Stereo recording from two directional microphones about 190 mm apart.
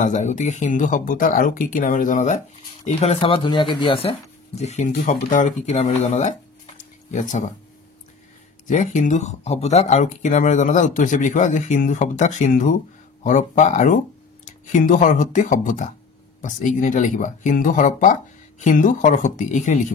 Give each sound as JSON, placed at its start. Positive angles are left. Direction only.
{"t": 0.0, "sound": "speech", "side_deg": 40}
{"t": 8.6, "sound": "speech", "side_deg": 40}